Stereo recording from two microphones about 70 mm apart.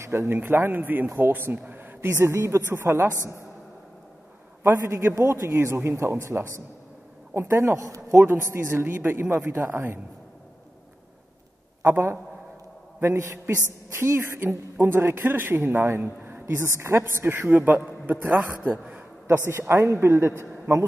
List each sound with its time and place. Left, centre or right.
0.0 s a woman's voice: right
2.8 s a man's voice: right
4.6 s a man's voice: right
8.5 s a woman's voice: right
9.3 s a man's voice: right
11.8 s a woman's voice: right
13.9 s a woman's voice: right
16.6 s a woman's voice: right